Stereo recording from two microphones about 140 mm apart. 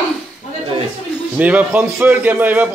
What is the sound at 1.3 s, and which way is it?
A man's voice, 10° right (ahead or behind).